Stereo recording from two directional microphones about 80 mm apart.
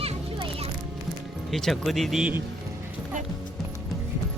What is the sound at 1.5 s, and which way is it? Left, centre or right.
Speech, centre.